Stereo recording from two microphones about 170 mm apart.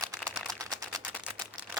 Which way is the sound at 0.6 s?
20° right (ahead or behind).